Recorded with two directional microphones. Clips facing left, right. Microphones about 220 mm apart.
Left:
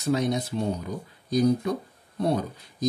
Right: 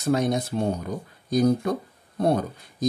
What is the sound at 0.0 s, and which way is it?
Speech, 50° right (ahead or behind).